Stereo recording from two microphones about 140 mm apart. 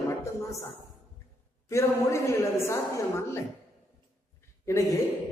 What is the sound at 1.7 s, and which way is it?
A man's voice, 20° left (ahead or behind).